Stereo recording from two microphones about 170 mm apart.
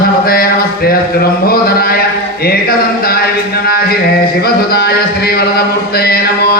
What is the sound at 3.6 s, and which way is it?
Mantra, 65° left (ahead or behind).